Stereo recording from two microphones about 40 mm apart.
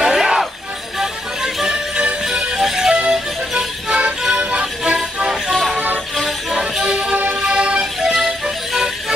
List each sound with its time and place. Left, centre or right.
0.0 s a sound: centre
0.9 s music: centre
4.4 s music: right
6.5 s music: centre